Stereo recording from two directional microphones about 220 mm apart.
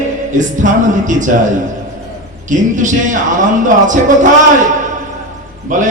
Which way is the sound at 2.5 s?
35° right (ahead or behind).